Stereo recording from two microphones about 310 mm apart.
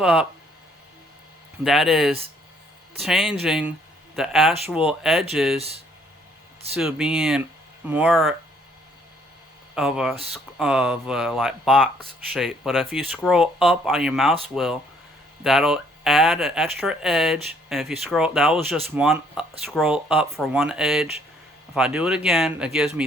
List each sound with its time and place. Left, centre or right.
0.0 s speech: centre
1.6 s speech: centre
5.5 s speech: centre
6.7 s speech: centre
9.7 s speech: centre